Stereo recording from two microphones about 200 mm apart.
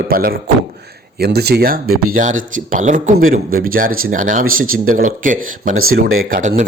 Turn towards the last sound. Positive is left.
turn(degrees=-40)  # may be behind; listen again after turning